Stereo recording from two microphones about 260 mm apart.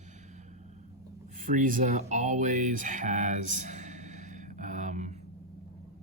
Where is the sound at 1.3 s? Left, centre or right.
Right.